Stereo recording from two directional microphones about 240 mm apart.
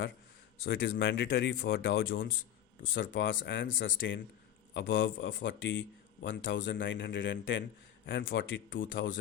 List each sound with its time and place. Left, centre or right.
0.6 s speech: left